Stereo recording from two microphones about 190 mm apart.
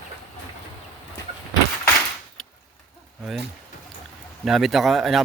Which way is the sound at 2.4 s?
Centre (ahead or behind).